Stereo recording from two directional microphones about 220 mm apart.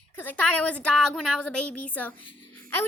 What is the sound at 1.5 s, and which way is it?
Speech, 90° left.